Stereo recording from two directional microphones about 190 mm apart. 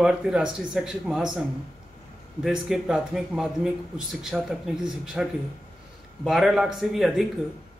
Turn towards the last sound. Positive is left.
turn(degrees=0)  # may be behind; listen again after turning